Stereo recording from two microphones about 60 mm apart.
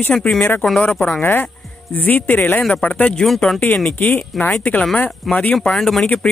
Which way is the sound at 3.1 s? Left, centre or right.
Centre.